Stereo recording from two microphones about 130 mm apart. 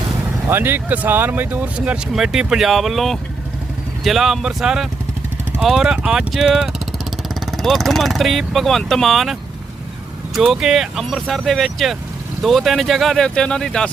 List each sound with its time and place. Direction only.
0.4 s speech: 15° right (ahead or behind); by 13.9 s 5° left (ahead or behind)